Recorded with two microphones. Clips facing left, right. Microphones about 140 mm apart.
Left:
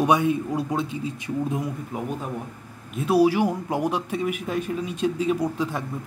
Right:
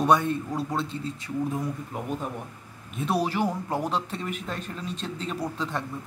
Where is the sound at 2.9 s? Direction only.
5° left (ahead or behind).